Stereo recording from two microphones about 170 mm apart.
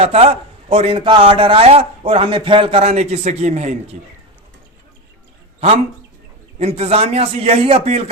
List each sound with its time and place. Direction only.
0.0 s a man's voice: 40° right (ahead or behind)
6.6 s a man's voice: 35° right (ahead or behind)